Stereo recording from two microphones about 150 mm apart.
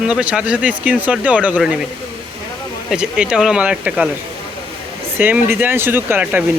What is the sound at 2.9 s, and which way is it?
Speech, 5° right (ahead or behind).